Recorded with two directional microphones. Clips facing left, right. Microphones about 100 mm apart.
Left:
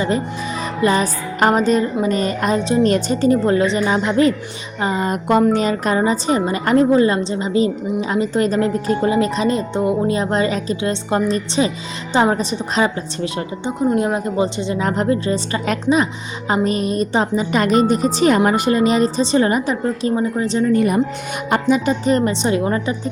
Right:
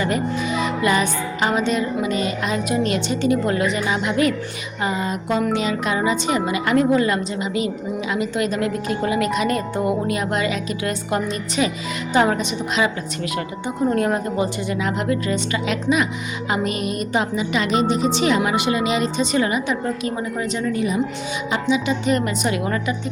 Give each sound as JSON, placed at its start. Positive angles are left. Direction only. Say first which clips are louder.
{"t": 0.6, "sound": "a woman's voice", "louder": "left 4 dB", "side_deg": 35}
{"t": 5.0, "sound": "a sound", "louder": "left 6 dB", "side_deg": 50}
{"t": 5.4, "sound": "a woman's voice", "louder": "left 5 dB", "side_deg": 40}
{"t": 13.7, "sound": "a woman's voice", "louder": "left 2 dB", "side_deg": 20}
{"t": 14.8, "sound": "a woman's voice", "louder": "left 5 dB", "side_deg": 40}
{"t": 20.7, "sound": "speech", "louder": "left 6 dB", "side_deg": 55}
{"t": 21.5, "sound": "a woman's voice", "louder": "left 5 dB", "side_deg": 45}